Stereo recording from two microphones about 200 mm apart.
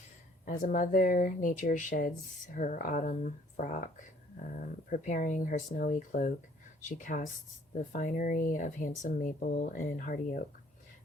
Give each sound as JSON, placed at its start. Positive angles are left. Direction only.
{"t": 0.4, "sound": "speech", "side_deg": 45}